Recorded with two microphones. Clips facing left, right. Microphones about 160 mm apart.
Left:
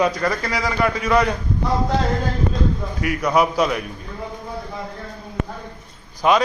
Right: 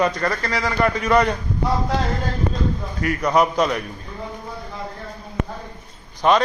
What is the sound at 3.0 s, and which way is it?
Speech, 10° left (ahead or behind).